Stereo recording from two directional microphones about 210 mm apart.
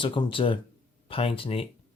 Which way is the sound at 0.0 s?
25° left (ahead or behind).